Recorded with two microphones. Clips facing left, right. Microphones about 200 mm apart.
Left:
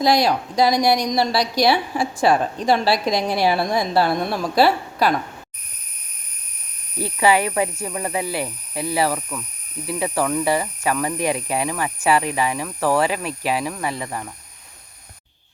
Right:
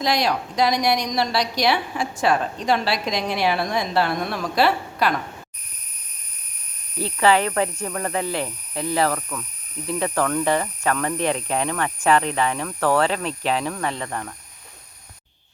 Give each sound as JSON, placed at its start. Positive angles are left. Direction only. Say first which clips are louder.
{"t": 0.0, "sound": "a woman's voice", "louder": "left 4 dB", "side_deg": 35}
{"t": 7.0, "sound": "speech", "louder": "even", "side_deg": 10}